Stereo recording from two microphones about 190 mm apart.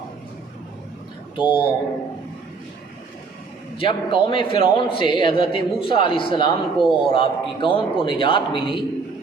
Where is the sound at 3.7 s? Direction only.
25° left (ahead or behind).